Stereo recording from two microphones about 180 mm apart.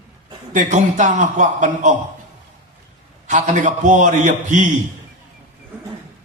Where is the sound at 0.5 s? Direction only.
45° right (ahead or behind).